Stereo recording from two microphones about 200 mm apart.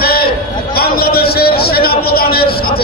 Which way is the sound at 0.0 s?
50° left (ahead or behind).